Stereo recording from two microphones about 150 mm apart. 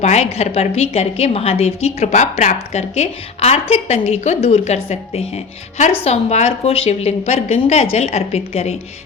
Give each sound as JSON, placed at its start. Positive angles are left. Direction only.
{"t": 0.0, "sound": "a woman's voice", "side_deg": 45}